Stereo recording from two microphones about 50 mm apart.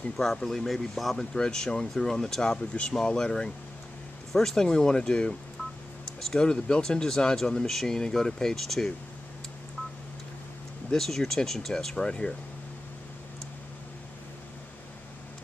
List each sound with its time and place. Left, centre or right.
0.2 s speech: centre
10.9 s speech: centre